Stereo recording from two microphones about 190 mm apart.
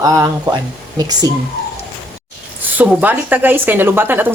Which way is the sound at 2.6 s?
10° right (ahead or behind).